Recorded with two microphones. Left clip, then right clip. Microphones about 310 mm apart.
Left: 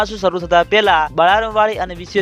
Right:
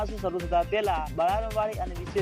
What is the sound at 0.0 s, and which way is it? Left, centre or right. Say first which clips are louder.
Speech: left 13 dB; left.